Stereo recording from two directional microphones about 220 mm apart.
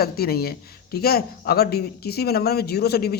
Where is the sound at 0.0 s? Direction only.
45° left (ahead or behind).